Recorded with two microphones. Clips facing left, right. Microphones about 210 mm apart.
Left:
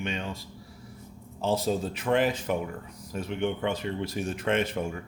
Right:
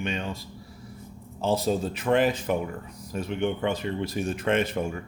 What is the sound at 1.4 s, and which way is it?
Speech, 40° right (ahead or behind).